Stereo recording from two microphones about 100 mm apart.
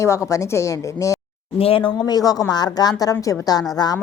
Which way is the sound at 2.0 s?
40° left (ahead or behind).